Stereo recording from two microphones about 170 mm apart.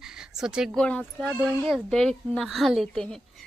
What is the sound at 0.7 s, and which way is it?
Speech, 5° left (ahead or behind).